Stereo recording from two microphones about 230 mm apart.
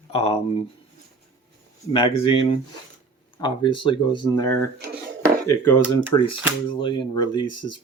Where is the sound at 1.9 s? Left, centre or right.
Left.